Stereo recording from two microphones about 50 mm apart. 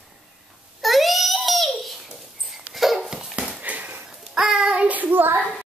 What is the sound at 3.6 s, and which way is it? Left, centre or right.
Sniff, right.